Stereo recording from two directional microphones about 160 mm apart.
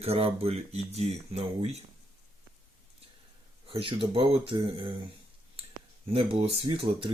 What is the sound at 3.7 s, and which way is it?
Speech, 35° right (ahead or behind).